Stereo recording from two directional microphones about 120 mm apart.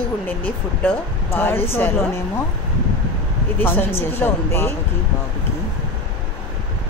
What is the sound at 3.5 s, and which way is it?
Speech, 15° left (ahead or behind).